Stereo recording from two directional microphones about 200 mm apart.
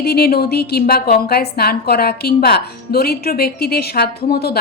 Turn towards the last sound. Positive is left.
turn(degrees=50)  # may be behind; listen again after turning